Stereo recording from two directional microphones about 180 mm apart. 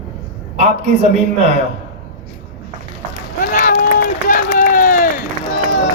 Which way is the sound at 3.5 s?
50° left (ahead or behind).